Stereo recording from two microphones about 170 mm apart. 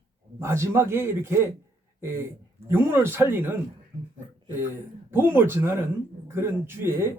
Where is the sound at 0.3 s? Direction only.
15° right (ahead or behind).